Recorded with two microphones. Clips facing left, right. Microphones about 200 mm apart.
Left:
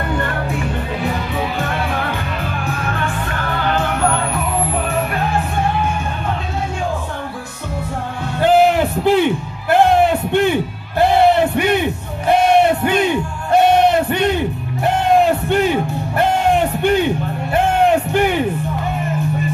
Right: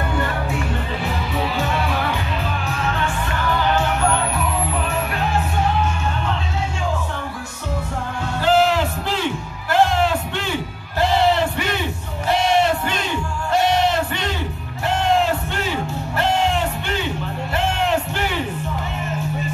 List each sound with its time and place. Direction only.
1.6 s music: 55° left (ahead or behind)
8.4 s music: 55° left (ahead or behind)